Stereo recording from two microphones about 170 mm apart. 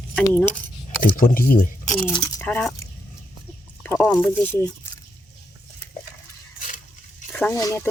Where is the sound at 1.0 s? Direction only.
50° left (ahead or behind).